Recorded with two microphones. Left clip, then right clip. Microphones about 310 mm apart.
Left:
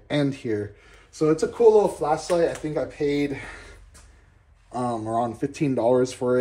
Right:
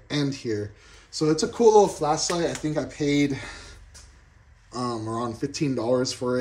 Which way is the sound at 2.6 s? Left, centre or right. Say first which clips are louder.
Left 2 dB; right.